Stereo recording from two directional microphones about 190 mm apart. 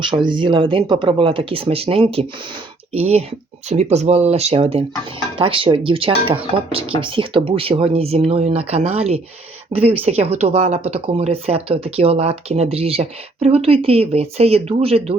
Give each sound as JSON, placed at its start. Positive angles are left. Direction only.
{"t": 0.1, "sound": "speech", "side_deg": -25}